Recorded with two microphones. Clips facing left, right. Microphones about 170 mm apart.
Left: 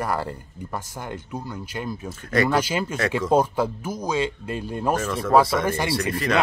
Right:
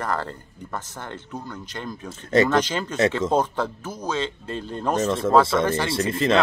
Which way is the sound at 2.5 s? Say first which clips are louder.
Even; 10° left (ahead or behind).